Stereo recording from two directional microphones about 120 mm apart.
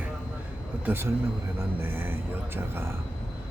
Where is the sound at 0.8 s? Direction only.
20° right (ahead or behind).